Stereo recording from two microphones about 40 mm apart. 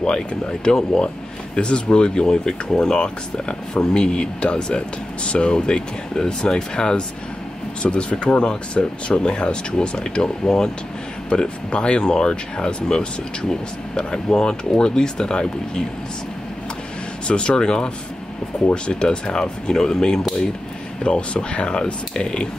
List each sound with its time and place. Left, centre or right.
0.0 s speech: left
17.3 s speech: left